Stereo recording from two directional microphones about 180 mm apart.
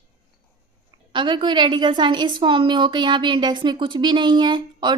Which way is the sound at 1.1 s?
25° right (ahead or behind).